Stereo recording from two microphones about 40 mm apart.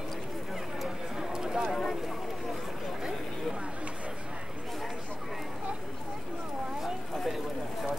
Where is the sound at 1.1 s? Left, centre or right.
Centre.